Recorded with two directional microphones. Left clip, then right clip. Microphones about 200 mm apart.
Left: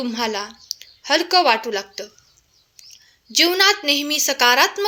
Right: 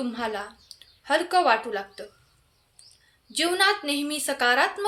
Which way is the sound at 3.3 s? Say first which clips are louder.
Left 7 dB; 30° left (ahead or behind).